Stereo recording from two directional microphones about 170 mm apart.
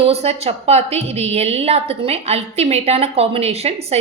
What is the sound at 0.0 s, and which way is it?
A woman's voice, 40° right (ahead or behind).